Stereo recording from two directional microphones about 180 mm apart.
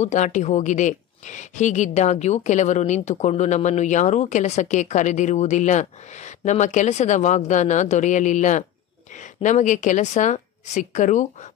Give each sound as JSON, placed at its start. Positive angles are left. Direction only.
{"t": 0.0, "sound": "a woman's voice", "side_deg": 40}